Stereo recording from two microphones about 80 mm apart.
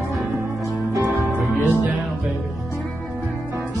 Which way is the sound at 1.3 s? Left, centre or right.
Centre.